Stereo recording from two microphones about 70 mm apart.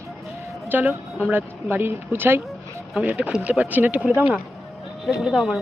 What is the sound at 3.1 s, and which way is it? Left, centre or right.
Speech, centre.